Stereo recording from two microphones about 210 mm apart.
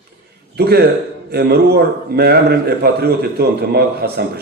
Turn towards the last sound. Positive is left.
turn(degrees=-50)  # may be behind; listen again after turning